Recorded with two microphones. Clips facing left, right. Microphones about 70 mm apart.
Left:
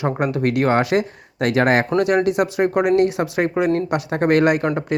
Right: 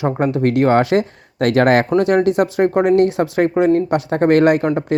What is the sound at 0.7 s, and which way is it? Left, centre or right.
Speech, right.